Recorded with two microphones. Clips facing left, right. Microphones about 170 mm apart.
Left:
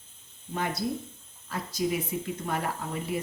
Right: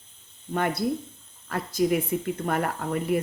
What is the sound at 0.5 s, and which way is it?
A woman's voice, 55° right (ahead or behind).